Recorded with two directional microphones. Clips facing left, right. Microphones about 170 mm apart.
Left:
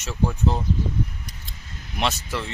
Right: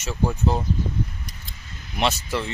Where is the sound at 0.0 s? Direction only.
5° right (ahead or behind).